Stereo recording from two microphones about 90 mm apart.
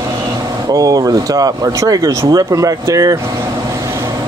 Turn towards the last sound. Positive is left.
turn(degrees=-40)  # may be behind; listen again after turning